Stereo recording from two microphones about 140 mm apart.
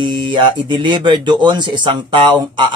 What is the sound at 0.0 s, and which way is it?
Speech, 35° right (ahead or behind).